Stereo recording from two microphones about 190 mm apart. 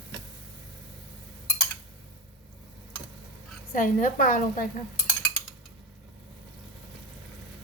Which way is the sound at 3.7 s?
45° left (ahead or behind).